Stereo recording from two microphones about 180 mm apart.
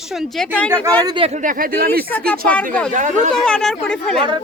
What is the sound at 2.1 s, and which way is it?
Speech, 10° left (ahead or behind).